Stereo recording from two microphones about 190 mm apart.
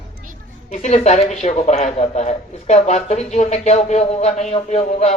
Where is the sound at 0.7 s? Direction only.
35° left (ahead or behind).